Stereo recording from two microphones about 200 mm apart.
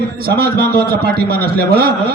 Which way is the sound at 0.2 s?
50° right (ahead or behind).